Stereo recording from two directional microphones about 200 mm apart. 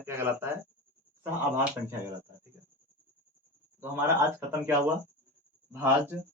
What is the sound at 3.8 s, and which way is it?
Speech, 10° right (ahead or behind).